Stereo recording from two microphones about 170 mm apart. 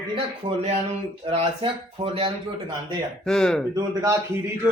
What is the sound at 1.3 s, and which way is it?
Speech, 35° right (ahead or behind).